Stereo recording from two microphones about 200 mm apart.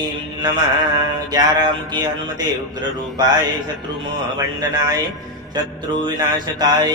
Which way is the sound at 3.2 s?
20° right (ahead or behind).